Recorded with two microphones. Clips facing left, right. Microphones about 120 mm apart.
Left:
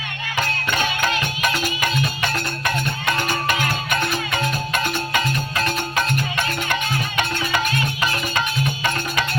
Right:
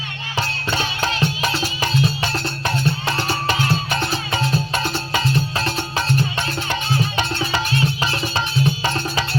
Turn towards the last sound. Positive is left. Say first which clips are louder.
# right 1 dB
turn(degrees=50)  # may be behind; listen again after turning